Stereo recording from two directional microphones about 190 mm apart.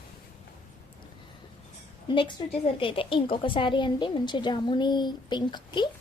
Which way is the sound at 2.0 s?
25° left (ahead or behind).